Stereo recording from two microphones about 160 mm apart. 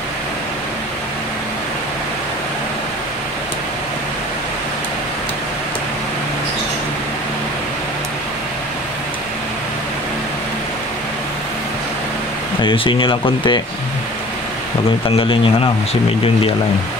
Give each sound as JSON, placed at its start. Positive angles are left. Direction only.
{"t": 12.6, "sound": "speech", "side_deg": 30}
{"t": 15.0, "sound": "speech", "side_deg": 35}